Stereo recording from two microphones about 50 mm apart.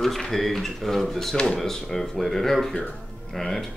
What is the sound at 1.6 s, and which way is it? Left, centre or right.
Speech, centre.